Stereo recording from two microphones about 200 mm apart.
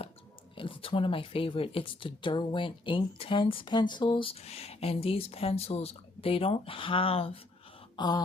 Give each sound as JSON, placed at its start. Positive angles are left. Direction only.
{"t": 0.5, "sound": "speech", "side_deg": 25}
{"t": 7.9, "sound": "throat clearing", "side_deg": 20}